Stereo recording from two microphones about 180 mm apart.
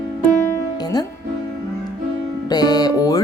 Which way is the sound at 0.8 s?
20° left (ahead or behind).